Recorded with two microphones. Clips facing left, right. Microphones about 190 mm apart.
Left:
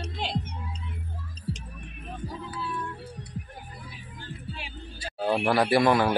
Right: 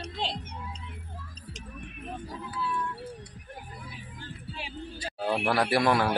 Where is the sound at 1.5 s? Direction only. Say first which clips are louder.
Left 12 dB; 30° left (ahead or behind).